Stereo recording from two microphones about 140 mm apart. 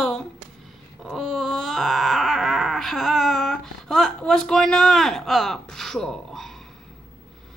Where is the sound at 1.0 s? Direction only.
Centre (ahead or behind).